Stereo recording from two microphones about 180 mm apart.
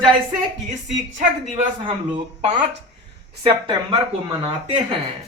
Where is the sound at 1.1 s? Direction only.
40° right (ahead or behind).